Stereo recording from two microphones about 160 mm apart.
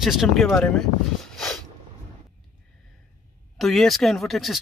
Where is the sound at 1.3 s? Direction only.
Centre (ahead or behind).